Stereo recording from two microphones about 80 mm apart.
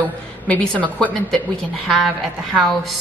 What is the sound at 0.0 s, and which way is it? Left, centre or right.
A woman's voice, centre.